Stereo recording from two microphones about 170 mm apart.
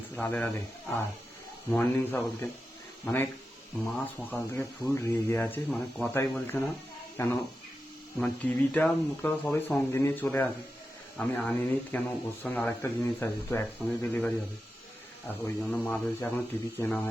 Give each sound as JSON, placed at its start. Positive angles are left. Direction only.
{"t": 0.2, "sound": "speech", "side_deg": 10}